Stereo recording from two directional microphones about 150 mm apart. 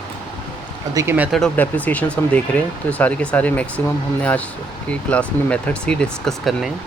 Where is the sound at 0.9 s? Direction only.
15° right (ahead or behind).